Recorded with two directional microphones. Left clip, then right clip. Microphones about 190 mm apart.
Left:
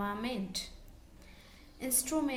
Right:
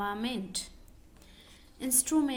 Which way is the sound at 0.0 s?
30° right (ahead or behind).